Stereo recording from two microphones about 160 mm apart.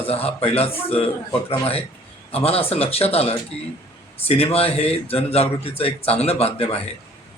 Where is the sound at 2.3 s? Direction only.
35° left (ahead or behind).